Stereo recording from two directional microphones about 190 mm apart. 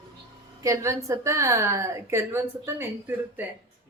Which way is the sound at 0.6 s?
15° right (ahead or behind).